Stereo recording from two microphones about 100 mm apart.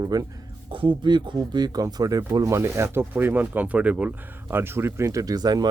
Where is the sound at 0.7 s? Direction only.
55° right (ahead or behind).